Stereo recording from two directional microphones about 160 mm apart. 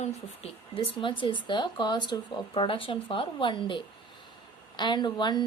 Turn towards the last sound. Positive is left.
turn(degrees=25)  # may be behind; listen again after turning